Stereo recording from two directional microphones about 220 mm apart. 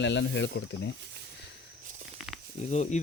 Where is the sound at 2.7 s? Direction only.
30° left (ahead or behind).